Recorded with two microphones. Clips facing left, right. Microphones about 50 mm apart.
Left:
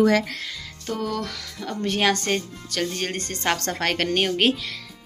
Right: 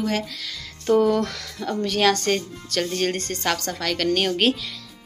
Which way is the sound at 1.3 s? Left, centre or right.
Centre.